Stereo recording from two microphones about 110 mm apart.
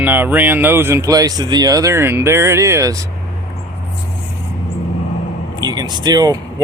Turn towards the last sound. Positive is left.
turn(degrees=-35)  # may be behind; listen again after turning